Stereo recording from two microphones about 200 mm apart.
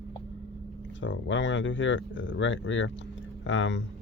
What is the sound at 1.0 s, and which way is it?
Speech, 65° left (ahead or behind).